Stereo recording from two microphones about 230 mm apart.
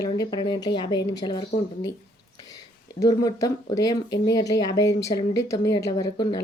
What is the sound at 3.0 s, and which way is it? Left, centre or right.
Speech, centre.